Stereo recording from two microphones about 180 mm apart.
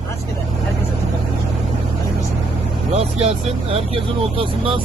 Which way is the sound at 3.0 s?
35° right (ahead or behind).